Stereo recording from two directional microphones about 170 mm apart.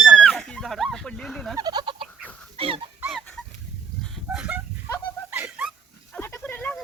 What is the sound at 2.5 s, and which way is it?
Dog, 35° right (ahead or behind).